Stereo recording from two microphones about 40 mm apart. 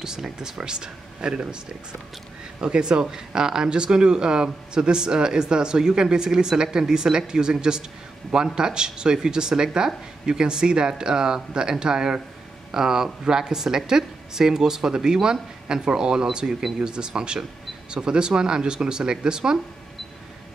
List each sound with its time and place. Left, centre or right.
0.0 s speech: centre